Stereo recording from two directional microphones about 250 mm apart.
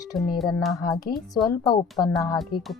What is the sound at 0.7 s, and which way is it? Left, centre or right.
Speech, centre.